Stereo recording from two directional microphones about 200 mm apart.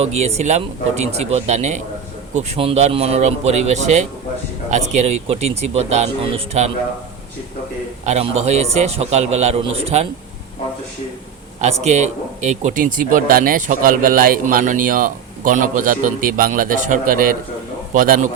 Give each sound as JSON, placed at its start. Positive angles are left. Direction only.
{"t": 0.0, "sound": "speech", "side_deg": -30}
{"t": 8.0, "sound": "speech", "side_deg": -35}
{"t": 11.6, "sound": "speech", "side_deg": -35}